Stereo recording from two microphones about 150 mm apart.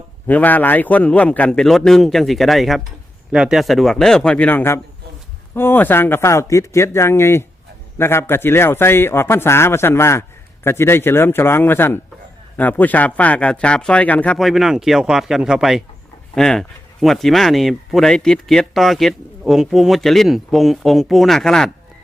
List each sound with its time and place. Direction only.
0.3 s a man's voice: 10° left (ahead or behind)